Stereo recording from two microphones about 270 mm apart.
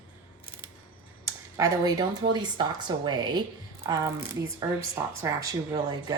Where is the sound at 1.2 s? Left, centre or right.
Centre.